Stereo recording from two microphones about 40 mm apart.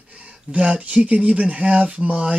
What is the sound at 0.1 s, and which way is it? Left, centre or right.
Speech, right.